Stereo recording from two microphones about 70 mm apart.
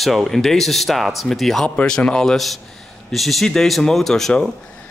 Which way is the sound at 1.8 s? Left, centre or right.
Centre.